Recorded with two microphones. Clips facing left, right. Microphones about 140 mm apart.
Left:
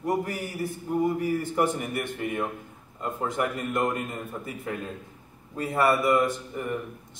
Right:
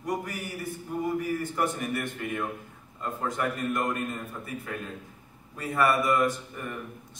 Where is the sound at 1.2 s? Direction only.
20° left (ahead or behind).